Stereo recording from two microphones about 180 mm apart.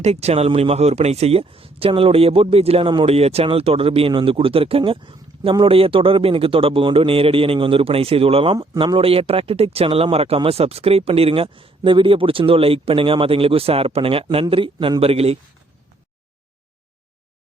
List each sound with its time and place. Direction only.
0.0 s speech: 35° right (ahead or behind)